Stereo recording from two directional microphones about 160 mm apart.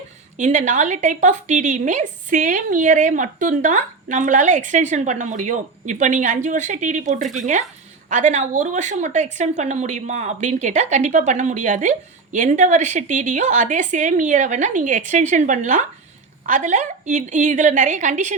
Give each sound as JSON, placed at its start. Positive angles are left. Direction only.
{"t": 0.3, "sound": "a woman's voice", "side_deg": -50}